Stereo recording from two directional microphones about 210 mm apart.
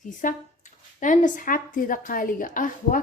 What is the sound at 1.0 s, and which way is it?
A woman's voice, 35° left (ahead or behind).